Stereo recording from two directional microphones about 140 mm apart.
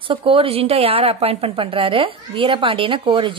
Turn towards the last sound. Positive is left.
turn(degrees=-40)  # may be behind; listen again after turning